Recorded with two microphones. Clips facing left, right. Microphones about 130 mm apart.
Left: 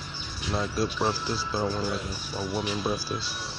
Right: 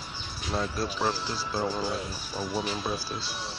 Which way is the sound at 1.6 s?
20° right (ahead or behind).